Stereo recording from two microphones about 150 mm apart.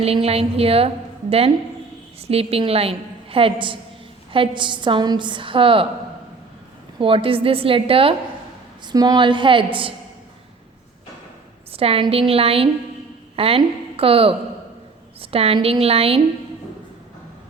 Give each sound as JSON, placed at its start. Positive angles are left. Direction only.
{"t": 0.0, "sound": "a woman's voice", "side_deg": -40}
{"t": 7.0, "sound": "a woman's voice", "side_deg": -35}
{"t": 8.9, "sound": "a woman's voice", "side_deg": -25}
{"t": 11.7, "sound": "a woman's voice", "side_deg": -40}